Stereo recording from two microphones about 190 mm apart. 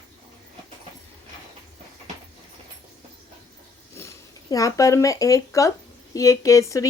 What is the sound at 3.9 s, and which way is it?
Speech, 15° left (ahead or behind).